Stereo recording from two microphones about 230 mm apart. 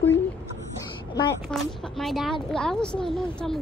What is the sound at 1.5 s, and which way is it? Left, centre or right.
Speech, centre.